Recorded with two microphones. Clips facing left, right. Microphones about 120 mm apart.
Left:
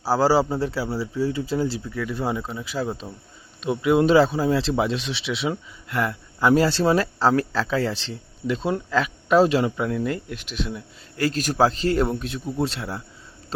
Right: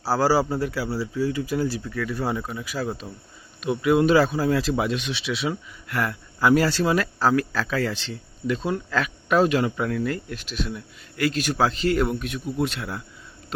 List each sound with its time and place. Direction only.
0.0 s speech: 20° left (ahead or behind)
11.2 s a man's voice: 40° left (ahead or behind)